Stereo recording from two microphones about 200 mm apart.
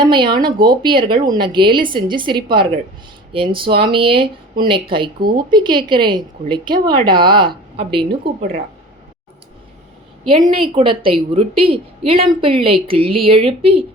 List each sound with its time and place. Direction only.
0.0 s a woman's voice: 25° right (ahead or behind)
10.4 s a woman's voice: 25° right (ahead or behind)